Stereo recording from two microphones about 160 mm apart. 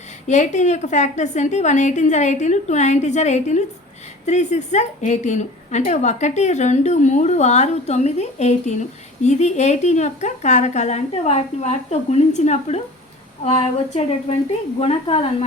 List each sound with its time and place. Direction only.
0.3 s a woman's voice: 50° left (ahead or behind)
14.8 s a woman's voice: 40° left (ahead or behind)